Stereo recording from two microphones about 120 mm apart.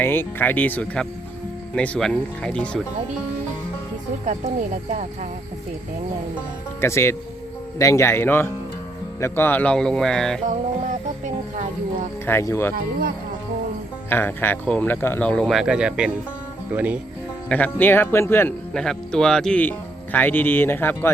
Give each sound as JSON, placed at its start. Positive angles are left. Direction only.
{"t": 0.0, "sound": "speech", "side_deg": 20}
{"t": 4.3, "sound": "speech", "side_deg": -85}
{"t": 6.8, "sound": "speech", "side_deg": 20}
{"t": 12.2, "sound": "speech", "side_deg": 20}
{"t": 14.1, "sound": "speech", "side_deg": 15}
{"t": 17.5, "sound": "speech", "side_deg": 15}
{"t": 18.7, "sound": "speech", "side_deg": 5}